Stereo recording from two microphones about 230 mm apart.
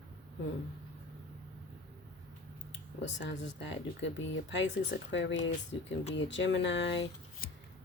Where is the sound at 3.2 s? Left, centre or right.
Left.